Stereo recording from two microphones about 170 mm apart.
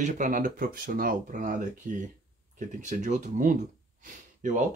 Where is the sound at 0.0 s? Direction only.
50° right (ahead or behind).